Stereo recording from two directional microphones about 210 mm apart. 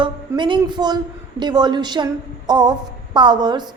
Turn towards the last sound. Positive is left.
turn(degrees=-20)  # may be behind; listen again after turning